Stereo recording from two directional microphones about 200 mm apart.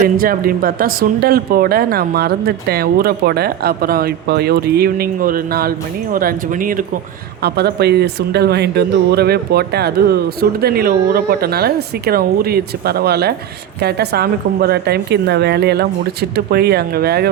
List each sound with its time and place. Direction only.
0.2 s speech: 45° right (ahead or behind)
7.4 s speech: 55° right (ahead or behind)